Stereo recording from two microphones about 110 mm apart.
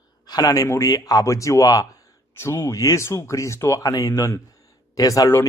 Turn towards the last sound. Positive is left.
turn(degrees=30)  # may be behind; listen again after turning